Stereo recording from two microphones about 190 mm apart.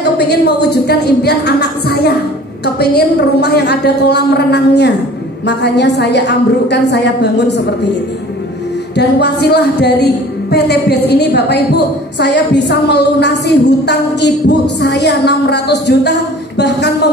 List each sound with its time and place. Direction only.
0.0 s a woman's voice: 60° left (ahead or behind)
8.9 s a woman's voice: 60° left (ahead or behind)